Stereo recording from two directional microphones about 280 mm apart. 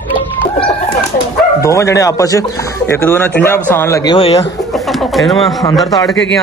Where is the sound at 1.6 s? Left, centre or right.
Centre.